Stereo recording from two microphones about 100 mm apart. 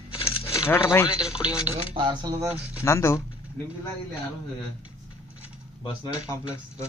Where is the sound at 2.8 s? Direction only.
25° left (ahead or behind).